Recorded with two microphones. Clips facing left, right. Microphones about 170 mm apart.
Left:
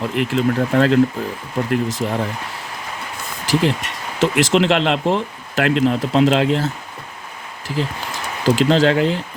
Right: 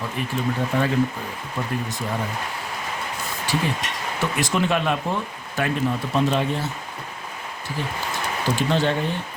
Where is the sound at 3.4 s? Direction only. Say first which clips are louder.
Left 7 dB; 90° left.